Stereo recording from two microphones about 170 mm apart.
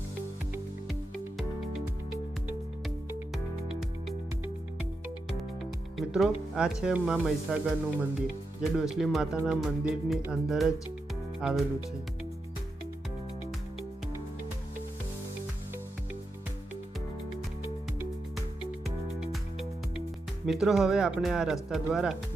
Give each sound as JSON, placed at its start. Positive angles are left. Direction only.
{"t": 3.3, "sound": "music", "side_deg": 0}
{"t": 6.0, "sound": "speech", "side_deg": -5}
{"t": 19.2, "sound": "music", "side_deg": 0}
{"t": 20.5, "sound": "speech", "side_deg": 0}